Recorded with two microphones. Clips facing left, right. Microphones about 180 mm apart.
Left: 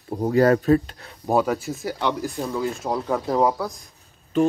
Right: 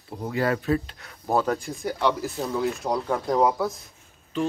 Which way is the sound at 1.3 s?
10° left (ahead or behind).